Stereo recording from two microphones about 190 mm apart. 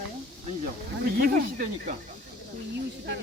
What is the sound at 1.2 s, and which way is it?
Speech, 45° right (ahead or behind).